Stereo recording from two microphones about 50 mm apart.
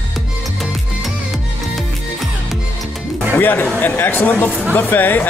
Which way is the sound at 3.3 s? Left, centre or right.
Left.